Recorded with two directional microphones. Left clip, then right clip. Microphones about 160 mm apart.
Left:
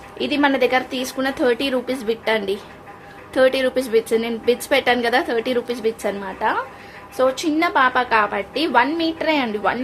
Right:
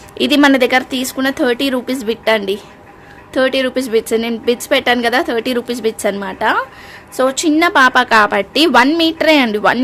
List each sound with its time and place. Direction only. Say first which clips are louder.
0.2 s a woman's voice: right 7 dB; 75° right (ahead or behind)